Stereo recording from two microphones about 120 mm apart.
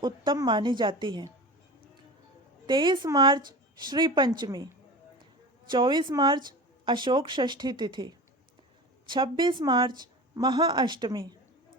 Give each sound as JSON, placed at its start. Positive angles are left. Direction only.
{"t": 0.0, "sound": "speech", "side_deg": -40}
{"t": 2.6, "sound": "speech", "side_deg": -40}
{"t": 5.7, "sound": "speech", "side_deg": -40}